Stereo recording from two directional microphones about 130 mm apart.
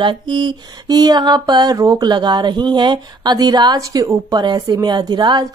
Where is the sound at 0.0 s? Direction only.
35° right (ahead or behind).